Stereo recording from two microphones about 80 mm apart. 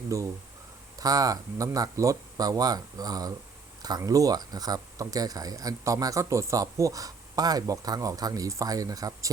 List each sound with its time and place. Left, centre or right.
0.1 s speech: right
0.9 s speech: right